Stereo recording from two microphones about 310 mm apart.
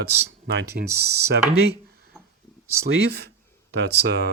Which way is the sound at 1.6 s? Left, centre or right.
Right.